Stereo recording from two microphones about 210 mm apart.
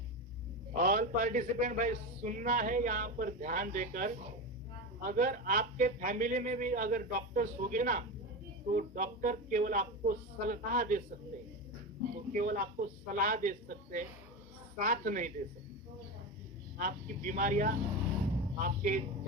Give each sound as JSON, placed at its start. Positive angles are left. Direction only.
{"t": 0.7, "sound": "a man's voice", "side_deg": -40}
{"t": 12.1, "sound": "a man's voice", "side_deg": -40}
{"t": 16.7, "sound": "a man's voice", "side_deg": -40}